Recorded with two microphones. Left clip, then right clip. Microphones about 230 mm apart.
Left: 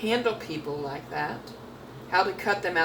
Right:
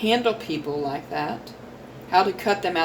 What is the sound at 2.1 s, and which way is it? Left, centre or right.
Speech, right.